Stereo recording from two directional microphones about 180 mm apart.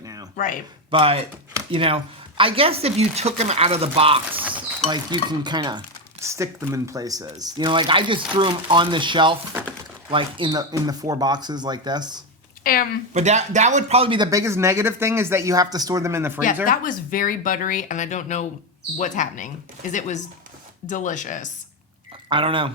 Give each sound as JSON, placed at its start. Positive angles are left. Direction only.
{"t": 0.0, "sound": "a sound", "side_deg": -20}
{"t": 0.3, "sound": "speech", "side_deg": 45}
{"t": 0.9, "sound": "speech", "side_deg": -30}
{"t": 12.7, "sound": "speech", "side_deg": 50}
{"t": 13.1, "sound": "speech", "side_deg": -40}
{"t": 16.6, "sound": "speech", "side_deg": 50}
{"t": 22.3, "sound": "speech", "side_deg": -30}